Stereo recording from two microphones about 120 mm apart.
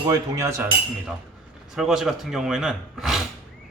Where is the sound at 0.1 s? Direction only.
25° right (ahead or behind).